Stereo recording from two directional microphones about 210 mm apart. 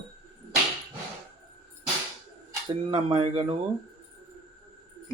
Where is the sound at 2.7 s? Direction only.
25° right (ahead or behind).